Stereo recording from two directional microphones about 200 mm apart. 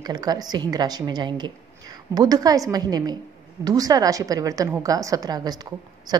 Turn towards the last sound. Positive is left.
turn(degrees=-20)  # may be behind; listen again after turning